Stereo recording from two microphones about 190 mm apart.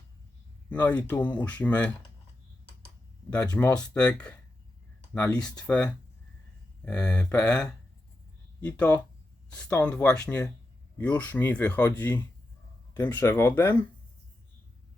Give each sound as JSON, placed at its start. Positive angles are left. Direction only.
{"t": 0.7, "sound": "speech", "side_deg": 10}
{"t": 3.5, "sound": "speech", "side_deg": 15}
{"t": 3.8, "sound": "speech", "side_deg": 5}